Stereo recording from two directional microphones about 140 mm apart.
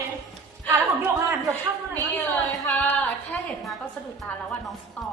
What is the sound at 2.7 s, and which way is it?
Singing, 10° left (ahead or behind).